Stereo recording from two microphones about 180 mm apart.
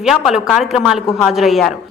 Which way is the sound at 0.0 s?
5° right (ahead or behind).